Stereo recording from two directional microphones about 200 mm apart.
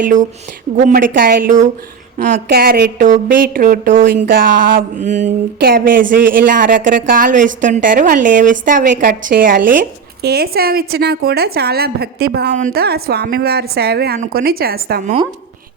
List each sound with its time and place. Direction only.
0.0 s a woman's voice: 40° right (ahead or behind)